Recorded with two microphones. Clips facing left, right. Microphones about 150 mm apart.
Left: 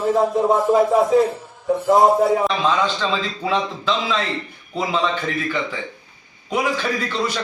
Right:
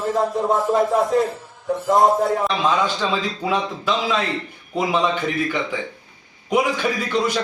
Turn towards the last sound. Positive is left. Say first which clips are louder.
# right 2 dB
turn(degrees=-15)  # may be behind; listen again after turning